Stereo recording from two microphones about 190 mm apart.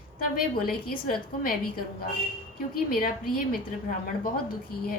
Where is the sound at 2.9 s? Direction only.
50° left (ahead or behind).